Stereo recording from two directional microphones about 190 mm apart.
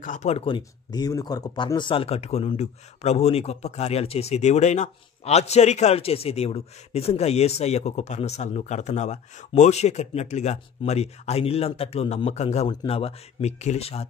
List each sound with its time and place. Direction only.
0.0 s speech: 40° left (ahead or behind)